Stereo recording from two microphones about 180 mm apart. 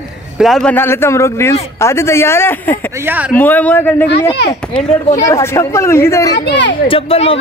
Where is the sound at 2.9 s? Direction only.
10° right (ahead or behind).